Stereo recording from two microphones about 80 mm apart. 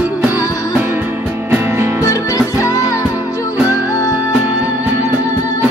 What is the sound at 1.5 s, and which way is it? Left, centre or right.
Music, right.